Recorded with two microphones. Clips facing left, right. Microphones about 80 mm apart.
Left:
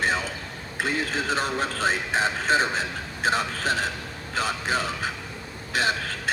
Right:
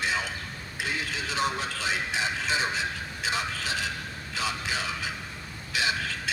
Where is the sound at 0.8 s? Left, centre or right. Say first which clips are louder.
Left 6 dB; left.